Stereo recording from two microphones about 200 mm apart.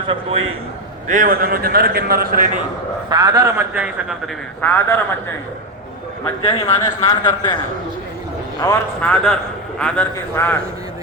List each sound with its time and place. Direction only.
1.0 s a man's voice: 40° right (ahead or behind)
3.1 s a man's voice: 20° right (ahead or behind)
4.6 s a man's voice: 10° left (ahead or behind)
6.6 s speech: 20° left (ahead or behind)
8.6 s a man's voice: 15° left (ahead or behind)
9.0 s a man's voice: 5° left (ahead or behind)